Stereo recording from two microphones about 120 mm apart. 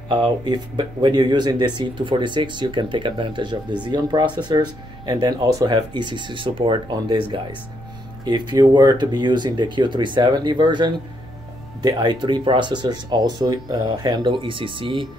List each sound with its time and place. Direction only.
0.1 s speech: 40° right (ahead or behind)